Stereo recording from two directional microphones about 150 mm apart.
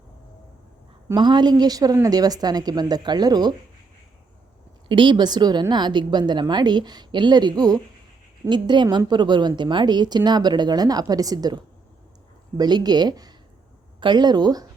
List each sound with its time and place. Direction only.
1.0 s a woman's voice: 30° right (ahead or behind)
4.9 s a woman's voice: 35° right (ahead or behind)